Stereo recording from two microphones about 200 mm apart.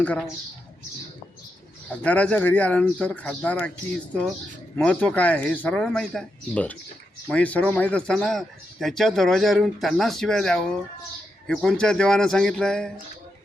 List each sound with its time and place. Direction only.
0.0 s speech: 10° left (ahead or behind)
1.9 s speech: 5° left (ahead or behind)